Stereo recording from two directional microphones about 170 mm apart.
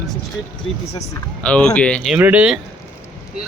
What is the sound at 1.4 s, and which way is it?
Speech, 5° left (ahead or behind).